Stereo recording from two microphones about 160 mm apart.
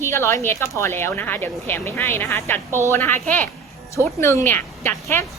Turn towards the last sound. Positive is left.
turn(degrees=15)  # may be behind; listen again after turning